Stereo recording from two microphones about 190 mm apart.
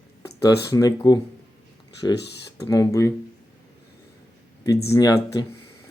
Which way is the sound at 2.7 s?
15° left (ahead or behind).